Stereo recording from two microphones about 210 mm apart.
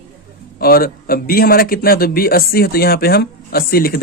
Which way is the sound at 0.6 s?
45° left (ahead or behind).